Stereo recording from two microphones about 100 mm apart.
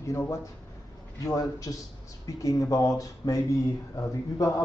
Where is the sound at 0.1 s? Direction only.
25° left (ahead or behind).